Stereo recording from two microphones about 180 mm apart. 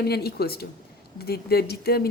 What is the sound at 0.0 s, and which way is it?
A woman's voice, 60° left (ahead or behind).